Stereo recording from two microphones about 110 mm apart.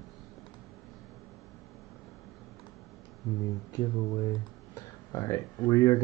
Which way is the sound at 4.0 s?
35° left (ahead or behind).